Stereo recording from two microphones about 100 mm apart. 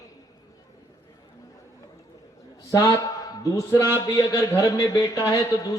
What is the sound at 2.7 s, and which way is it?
A man's voice, 35° left (ahead or behind).